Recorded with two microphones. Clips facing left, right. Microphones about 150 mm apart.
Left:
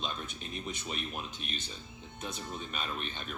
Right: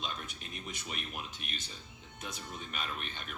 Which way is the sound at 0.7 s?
30° left (ahead or behind).